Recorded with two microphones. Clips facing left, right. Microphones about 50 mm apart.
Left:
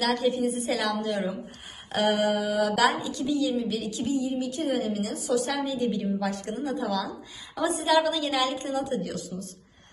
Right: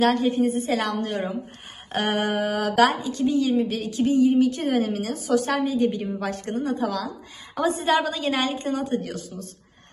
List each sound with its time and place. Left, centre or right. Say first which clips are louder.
0.0 s speech: right 5 dB; right